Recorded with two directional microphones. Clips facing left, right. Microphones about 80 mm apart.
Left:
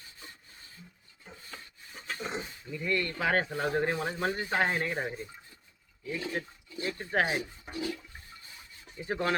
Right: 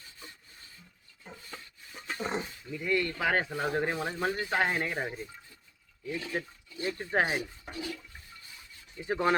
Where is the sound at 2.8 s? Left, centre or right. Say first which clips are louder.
Right 1 dB; centre.